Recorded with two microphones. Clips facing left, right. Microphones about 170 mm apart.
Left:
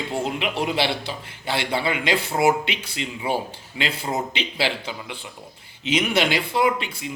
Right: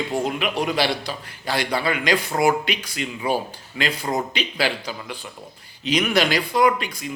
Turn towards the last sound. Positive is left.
turn(degrees=25)  # may be behind; listen again after turning